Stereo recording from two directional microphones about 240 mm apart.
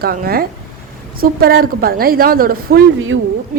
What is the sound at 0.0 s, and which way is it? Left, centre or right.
A woman's voice, right.